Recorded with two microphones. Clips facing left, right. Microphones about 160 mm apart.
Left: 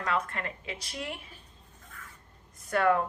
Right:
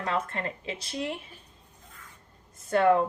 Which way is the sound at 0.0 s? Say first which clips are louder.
Right 1 dB; 25° right (ahead or behind).